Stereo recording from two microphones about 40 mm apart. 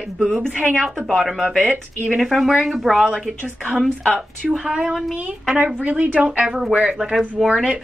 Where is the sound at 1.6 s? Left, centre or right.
Right.